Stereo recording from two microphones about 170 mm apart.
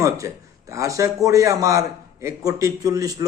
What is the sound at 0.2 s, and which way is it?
A man's voice, 15° right (ahead or behind).